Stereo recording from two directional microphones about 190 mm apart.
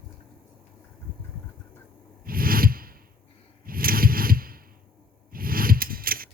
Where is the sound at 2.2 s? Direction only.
50° right (ahead or behind).